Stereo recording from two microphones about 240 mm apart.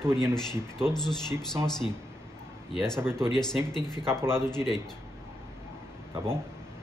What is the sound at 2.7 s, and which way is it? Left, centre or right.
Speech, centre.